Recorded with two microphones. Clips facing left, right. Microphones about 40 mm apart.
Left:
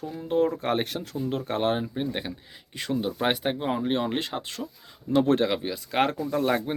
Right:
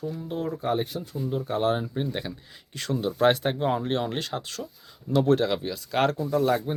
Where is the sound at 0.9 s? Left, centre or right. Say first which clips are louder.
Left 1 dB; left.